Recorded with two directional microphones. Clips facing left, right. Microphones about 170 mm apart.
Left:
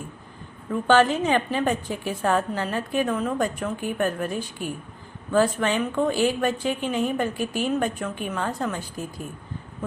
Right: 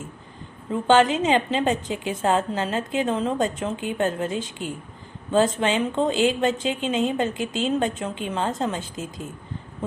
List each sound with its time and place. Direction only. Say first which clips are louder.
0.7 s a woman's voice: right 1 dB; 20° right (ahead or behind)